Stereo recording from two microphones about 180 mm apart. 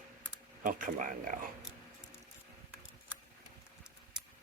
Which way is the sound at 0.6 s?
50° right (ahead or behind).